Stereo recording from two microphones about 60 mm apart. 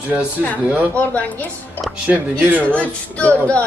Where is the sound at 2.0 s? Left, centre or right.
Right.